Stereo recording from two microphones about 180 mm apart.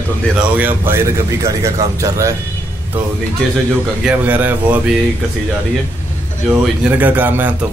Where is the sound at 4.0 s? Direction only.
5° right (ahead or behind).